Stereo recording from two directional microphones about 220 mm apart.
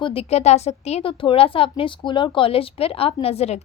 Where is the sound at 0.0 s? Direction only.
25° left (ahead or behind).